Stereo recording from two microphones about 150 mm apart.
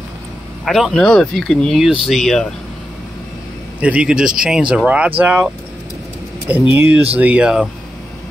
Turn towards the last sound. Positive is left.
turn(degrees=-5)  # may be behind; listen again after turning